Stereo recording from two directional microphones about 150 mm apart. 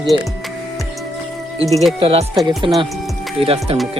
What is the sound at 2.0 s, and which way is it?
Speech, 40° right (ahead or behind).